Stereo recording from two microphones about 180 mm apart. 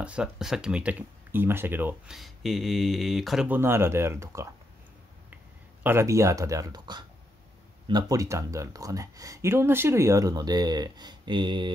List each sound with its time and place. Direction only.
0.0 s speech: 5° right (ahead or behind)
5.9 s speech: 15° right (ahead or behind)